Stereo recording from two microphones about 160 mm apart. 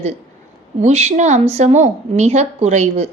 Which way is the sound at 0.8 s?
45° right (ahead or behind).